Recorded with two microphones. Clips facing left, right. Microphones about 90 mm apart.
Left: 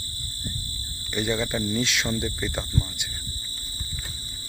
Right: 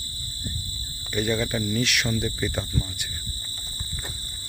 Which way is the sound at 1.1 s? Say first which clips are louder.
Right 1 dB; 15° left (ahead or behind).